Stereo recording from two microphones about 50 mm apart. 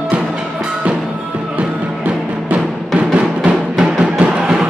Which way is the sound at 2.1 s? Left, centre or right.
Right.